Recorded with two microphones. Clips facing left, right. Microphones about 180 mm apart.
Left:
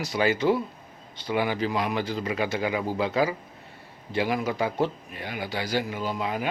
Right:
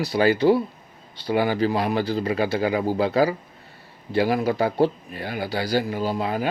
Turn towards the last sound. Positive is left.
turn(degrees=-35)  # may be behind; listen again after turning